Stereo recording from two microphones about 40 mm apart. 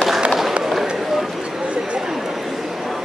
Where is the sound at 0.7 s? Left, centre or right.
Centre.